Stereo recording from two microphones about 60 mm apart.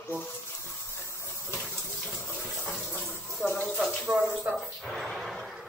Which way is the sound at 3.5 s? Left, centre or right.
Left.